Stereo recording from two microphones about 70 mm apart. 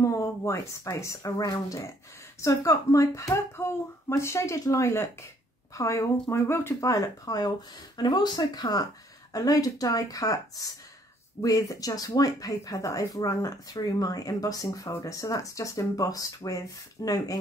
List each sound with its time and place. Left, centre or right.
0.0 s speech: left
1.4 s speech: left
2.4 s speech: left
6.3 s speech: left
6.9 s speech: left
8.0 s speech: left
9.3 s speech: left